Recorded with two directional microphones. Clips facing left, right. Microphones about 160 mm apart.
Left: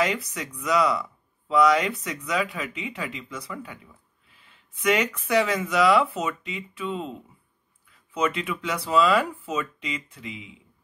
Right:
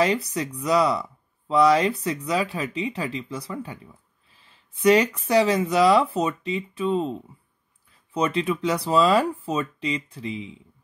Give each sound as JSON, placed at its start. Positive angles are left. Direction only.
{"t": 0.0, "sound": "speech", "side_deg": -30}
{"t": 8.1, "sound": "speech", "side_deg": -35}